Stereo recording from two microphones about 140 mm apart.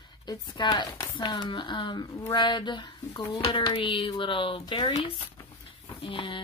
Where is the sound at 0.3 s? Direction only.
35° left (ahead or behind).